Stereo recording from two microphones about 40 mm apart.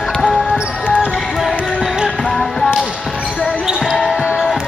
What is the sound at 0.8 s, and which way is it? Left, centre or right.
Basketball bounce, left.